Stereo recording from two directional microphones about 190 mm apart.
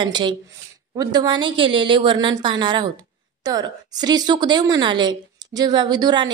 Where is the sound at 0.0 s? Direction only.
25° right (ahead or behind).